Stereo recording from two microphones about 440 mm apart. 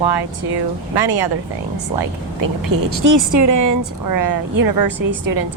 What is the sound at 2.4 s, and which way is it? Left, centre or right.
Speech, right.